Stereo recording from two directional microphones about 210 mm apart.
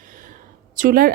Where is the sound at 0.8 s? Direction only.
45° right (ahead or behind).